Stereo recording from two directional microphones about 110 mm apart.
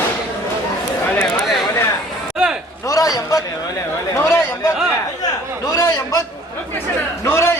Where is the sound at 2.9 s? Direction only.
30° left (ahead or behind).